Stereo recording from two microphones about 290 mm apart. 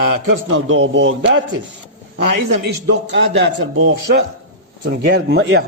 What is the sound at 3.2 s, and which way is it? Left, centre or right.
A man's voice, right.